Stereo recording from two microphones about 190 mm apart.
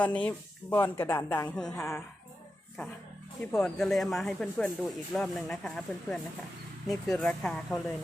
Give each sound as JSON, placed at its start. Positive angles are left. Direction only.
{"t": 0.0, "sound": "speech", "side_deg": 5}
{"t": 3.5, "sound": "speech", "side_deg": 0}